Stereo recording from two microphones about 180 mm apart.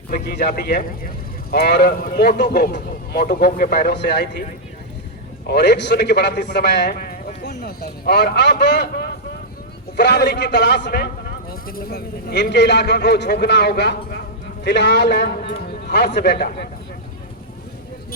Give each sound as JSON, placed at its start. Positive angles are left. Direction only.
{"t": 0.1, "sound": "a man's voice", "side_deg": 60}
{"t": 5.5, "sound": "a man's voice", "side_deg": 65}